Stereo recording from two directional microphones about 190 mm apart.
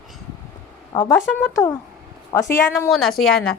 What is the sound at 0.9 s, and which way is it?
Speech, 10° left (ahead or behind).